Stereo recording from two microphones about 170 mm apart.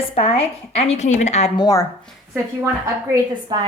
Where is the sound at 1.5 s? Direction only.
20° left (ahead or behind).